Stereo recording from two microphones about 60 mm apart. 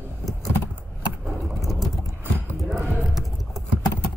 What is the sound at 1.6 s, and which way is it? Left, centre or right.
Boat, centre.